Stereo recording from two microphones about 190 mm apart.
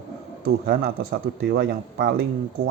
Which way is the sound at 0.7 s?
55° right (ahead or behind).